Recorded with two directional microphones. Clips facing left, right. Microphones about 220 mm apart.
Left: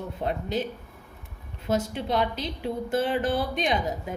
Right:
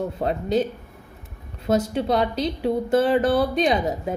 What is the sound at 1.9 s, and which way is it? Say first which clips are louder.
Speech: right 5 dB; 35° right (ahead or behind).